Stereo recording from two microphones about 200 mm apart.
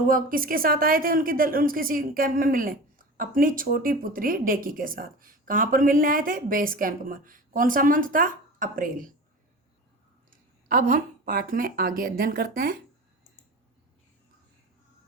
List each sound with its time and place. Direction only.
0.1 s a woman's voice: 45° right (ahead or behind)
10.2 s a woman's voice: 45° right (ahead or behind)